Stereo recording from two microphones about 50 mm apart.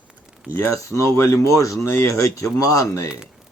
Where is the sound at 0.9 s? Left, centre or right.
Left.